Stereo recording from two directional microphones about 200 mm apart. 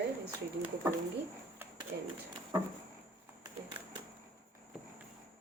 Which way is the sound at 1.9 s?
60° right (ahead or behind).